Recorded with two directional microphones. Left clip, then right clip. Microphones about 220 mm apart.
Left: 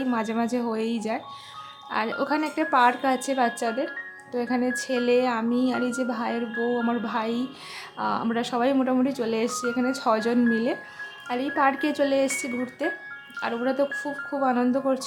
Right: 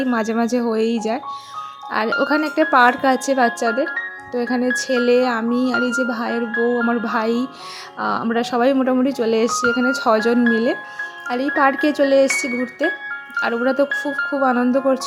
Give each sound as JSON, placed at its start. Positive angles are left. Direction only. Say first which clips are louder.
{"t": 0.0, "sound": "speech", "louder": "right 7 dB", "side_deg": -25}
{"t": 6.5, "sound": "speech", "louder": "right 10 dB", "side_deg": -45}
{"t": 6.8, "sound": "speech", "louder": "right 7 dB", "side_deg": -20}